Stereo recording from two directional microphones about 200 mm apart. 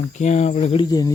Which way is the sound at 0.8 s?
20° left (ahead or behind).